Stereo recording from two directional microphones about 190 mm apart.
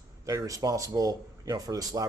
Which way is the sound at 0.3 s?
15° right (ahead or behind).